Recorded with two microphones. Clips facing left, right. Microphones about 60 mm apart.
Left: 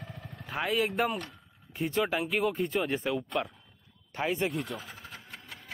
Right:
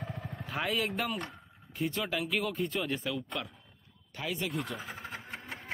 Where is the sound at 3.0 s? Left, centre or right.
Left.